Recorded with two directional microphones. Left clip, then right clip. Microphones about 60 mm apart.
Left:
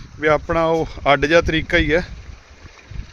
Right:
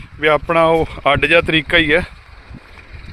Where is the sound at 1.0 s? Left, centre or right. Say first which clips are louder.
Even; centre.